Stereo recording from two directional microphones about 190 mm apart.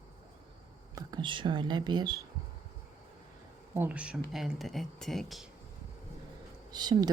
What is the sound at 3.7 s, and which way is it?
Speech, 5° right (ahead or behind).